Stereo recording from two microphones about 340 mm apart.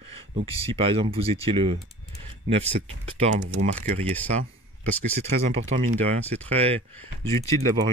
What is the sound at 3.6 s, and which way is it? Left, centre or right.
Speech, centre.